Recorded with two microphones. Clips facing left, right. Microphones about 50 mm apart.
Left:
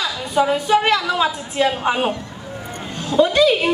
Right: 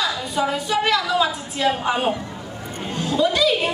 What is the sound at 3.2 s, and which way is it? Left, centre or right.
Speech, left.